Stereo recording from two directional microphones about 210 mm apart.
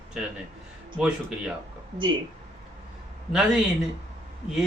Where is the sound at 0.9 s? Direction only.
5° right (ahead or behind).